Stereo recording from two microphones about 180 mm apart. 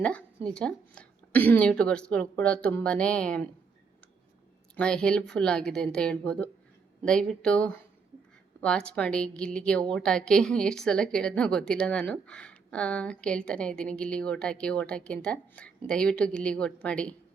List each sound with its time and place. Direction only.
0.0 s a sound: 5° left (ahead or behind)
0.4 s a woman's voice: 5° left (ahead or behind)
4.8 s a woman's voice: 5° left (ahead or behind)